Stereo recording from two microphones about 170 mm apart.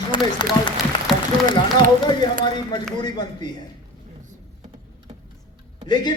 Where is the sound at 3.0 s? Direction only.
25° left (ahead or behind).